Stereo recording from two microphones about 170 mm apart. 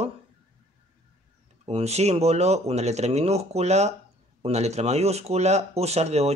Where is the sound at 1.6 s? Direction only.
40° right (ahead or behind).